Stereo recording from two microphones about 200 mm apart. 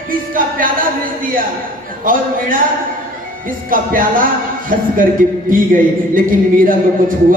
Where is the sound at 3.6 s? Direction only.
45° right (ahead or behind).